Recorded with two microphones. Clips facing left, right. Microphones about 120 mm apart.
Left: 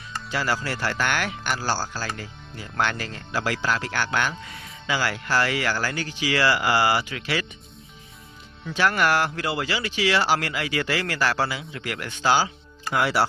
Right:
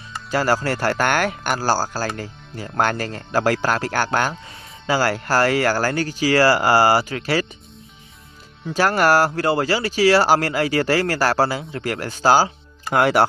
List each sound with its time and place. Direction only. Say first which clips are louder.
0.3 s speech: right 7 dB; 45° right (ahead or behind); by 4.8 s 25° right (ahead or behind)
4.9 s speech: right 6 dB; 40° right (ahead or behind)
8.6 s speech: right 5 dB; 40° right (ahead or behind)